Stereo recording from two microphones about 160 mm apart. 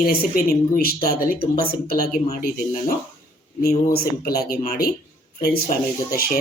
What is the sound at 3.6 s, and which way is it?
A woman's voice, 75° left (ahead or behind).